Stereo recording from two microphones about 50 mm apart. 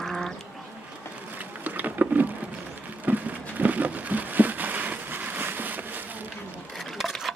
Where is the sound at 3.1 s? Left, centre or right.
Right.